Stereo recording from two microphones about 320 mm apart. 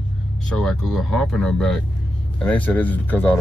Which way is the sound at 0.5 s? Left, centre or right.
Centre.